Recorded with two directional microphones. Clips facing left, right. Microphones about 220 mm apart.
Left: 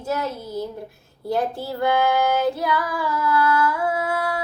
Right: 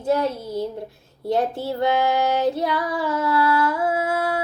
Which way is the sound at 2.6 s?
25° right (ahead or behind).